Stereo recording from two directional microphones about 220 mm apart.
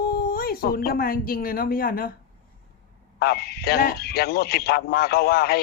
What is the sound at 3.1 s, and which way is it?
Speech, 45° left (ahead or behind).